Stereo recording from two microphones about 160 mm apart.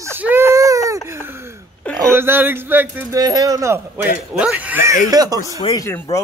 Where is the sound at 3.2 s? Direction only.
20° right (ahead or behind).